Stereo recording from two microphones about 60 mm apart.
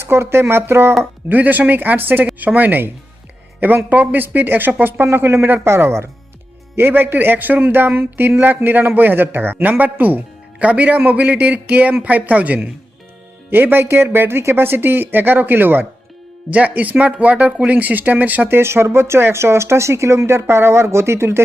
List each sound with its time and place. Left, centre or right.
0.0 s speech: right
1.3 s a man's voice: right
6.7 s a man's voice: right
13.5 s a man's voice: right